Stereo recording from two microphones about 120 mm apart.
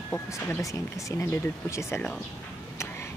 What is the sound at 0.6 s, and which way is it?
Speech, 25° left (ahead or behind).